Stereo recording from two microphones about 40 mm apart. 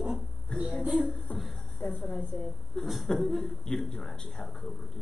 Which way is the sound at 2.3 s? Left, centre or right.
Left.